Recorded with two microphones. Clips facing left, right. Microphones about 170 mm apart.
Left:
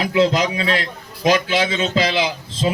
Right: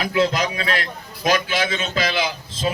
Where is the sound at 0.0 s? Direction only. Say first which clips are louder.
Left 3 dB; 20° left (ahead or behind).